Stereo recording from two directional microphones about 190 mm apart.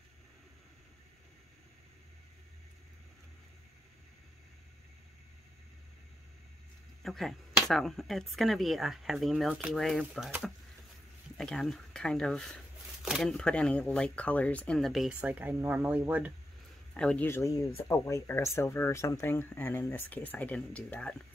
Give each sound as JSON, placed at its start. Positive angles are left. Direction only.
{"t": 7.0, "sound": "speech", "side_deg": 0}
{"t": 11.3, "sound": "speech", "side_deg": 0}
{"t": 16.9, "sound": "speech", "side_deg": 5}